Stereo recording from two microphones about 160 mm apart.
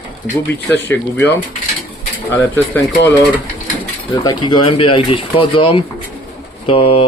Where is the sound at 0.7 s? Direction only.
15° left (ahead or behind).